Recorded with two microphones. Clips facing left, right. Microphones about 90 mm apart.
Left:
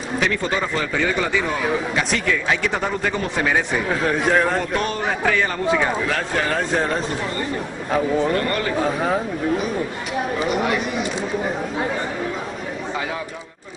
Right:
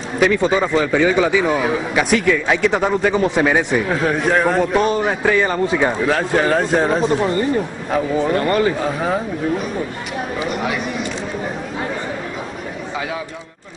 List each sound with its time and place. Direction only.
0.2 s a man's voice: 10° right (ahead or behind)
3.9 s a man's voice: centre (ahead or behind)
4.7 s a man's voice: 20° right (ahead or behind)
7.9 s a man's voice: centre (ahead or behind)
8.4 s a man's voice: 15° right (ahead or behind)
8.7 s a man's voice: centre (ahead or behind)
10.4 s a man's voice: centre (ahead or behind)